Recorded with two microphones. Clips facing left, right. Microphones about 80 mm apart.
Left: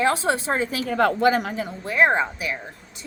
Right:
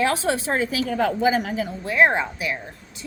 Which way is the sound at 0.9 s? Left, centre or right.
Left.